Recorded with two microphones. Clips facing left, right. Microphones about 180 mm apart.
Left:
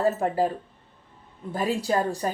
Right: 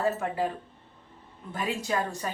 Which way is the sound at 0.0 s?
35° left (ahead or behind).